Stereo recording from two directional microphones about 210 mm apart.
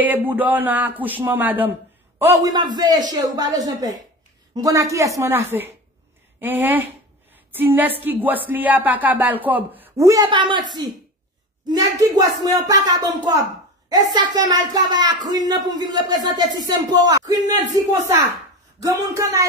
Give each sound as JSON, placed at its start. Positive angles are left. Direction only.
{"t": 0.0, "sound": "speech", "side_deg": -10}
{"t": 11.6, "sound": "a woman's voice", "side_deg": -15}